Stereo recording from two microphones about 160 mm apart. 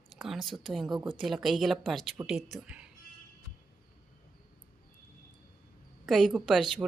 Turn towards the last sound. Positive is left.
turn(degrees=0)  # may be behind; listen again after turning